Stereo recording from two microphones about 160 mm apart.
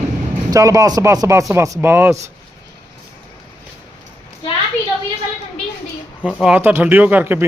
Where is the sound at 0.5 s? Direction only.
20° right (ahead or behind).